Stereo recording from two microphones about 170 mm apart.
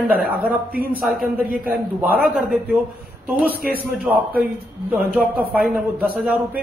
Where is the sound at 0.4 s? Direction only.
10° right (ahead or behind).